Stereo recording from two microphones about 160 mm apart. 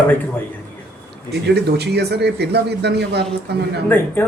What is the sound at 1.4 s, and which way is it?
A man's voice, 90° right.